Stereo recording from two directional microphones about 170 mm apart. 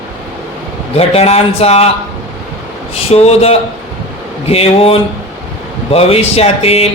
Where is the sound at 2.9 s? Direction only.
40° left (ahead or behind).